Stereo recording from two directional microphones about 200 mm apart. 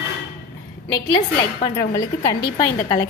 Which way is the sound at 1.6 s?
15° left (ahead or behind).